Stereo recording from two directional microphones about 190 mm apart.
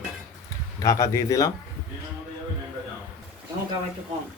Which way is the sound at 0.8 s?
15° left (ahead or behind).